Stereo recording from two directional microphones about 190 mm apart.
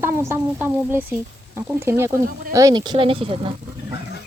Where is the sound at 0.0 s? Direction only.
15° right (ahead or behind); by 3.5 s 30° right (ahead or behind).